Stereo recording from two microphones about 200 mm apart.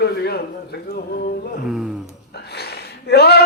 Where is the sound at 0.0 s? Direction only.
55° left (ahead or behind).